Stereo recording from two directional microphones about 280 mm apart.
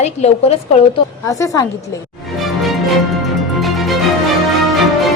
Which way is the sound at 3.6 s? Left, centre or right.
Centre.